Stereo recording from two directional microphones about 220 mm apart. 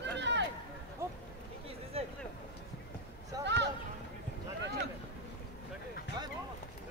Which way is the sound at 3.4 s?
50° right (ahead or behind).